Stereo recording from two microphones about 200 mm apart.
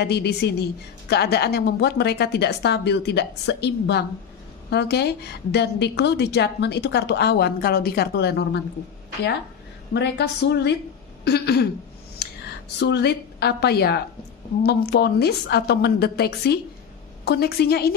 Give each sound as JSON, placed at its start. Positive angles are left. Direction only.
{"t": 0.0, "sound": "a woman's voice", "side_deg": 55}
{"t": 9.9, "sound": "a woman's voice", "side_deg": 60}
{"t": 12.7, "sound": "a woman's voice", "side_deg": 60}